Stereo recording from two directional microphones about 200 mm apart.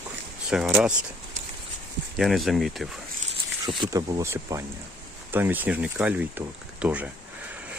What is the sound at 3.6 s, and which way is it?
Speech, 20° right (ahead or behind).